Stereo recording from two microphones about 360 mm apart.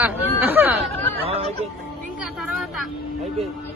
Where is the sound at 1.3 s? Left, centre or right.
Centre.